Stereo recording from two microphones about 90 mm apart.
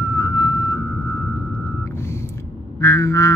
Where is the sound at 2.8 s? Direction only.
35° left (ahead or behind).